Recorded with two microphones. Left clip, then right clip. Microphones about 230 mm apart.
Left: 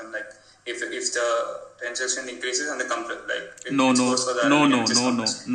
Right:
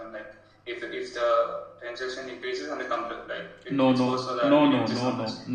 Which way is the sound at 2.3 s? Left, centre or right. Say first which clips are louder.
Left 5 dB; left.